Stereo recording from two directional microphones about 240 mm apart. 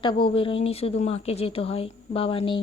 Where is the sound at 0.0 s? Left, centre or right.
Left.